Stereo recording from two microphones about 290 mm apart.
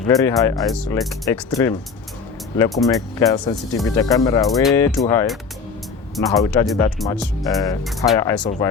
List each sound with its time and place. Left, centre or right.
0.1 s speech: centre
6.2 s speech: centre
8.4 s speech: centre